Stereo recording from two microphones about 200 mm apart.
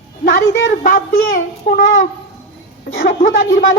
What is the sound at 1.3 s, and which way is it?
Speech, 50° left (ahead or behind).